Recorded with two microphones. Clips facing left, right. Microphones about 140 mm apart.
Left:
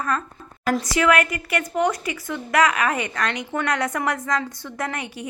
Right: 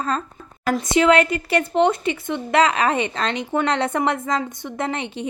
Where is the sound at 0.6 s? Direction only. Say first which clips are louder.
Right 1 dB; centre (ahead or behind).